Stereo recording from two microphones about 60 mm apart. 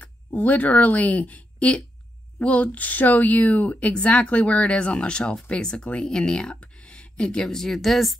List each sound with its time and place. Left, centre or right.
0.0 s speech: left
7.4 s speech: centre